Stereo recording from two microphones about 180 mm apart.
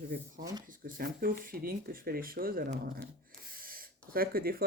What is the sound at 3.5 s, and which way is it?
Gasp, 55° right (ahead or behind).